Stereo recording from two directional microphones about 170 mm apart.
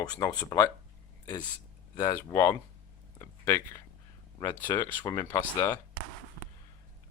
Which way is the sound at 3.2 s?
15° left (ahead or behind).